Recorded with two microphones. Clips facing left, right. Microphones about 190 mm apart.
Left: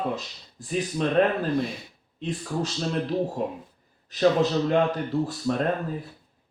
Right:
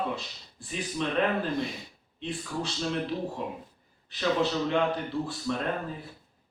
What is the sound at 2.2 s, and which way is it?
Speech, 40° left (ahead or behind).